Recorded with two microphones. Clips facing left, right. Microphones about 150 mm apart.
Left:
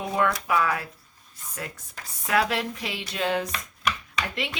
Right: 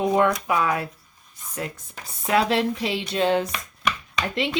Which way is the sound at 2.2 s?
25° right (ahead or behind).